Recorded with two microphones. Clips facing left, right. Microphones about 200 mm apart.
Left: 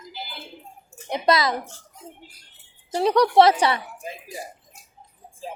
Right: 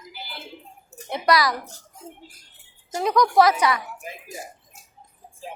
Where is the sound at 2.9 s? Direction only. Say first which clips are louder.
Left 2 dB; 30° left (ahead or behind).